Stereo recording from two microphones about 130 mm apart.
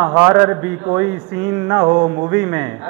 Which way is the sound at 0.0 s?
15° right (ahead or behind).